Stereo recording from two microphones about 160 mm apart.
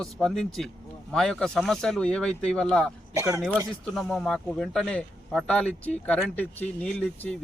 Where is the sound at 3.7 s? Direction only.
Centre (ahead or behind).